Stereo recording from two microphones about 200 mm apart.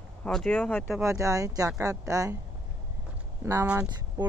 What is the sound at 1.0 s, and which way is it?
Speech, 15° right (ahead or behind).